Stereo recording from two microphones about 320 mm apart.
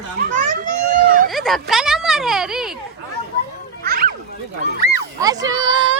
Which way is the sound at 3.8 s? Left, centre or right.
Right.